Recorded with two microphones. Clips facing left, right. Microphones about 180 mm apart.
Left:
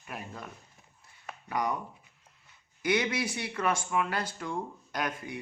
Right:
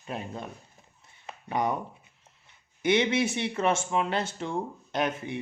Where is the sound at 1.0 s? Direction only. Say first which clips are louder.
Right 3 dB; 25° right (ahead or behind).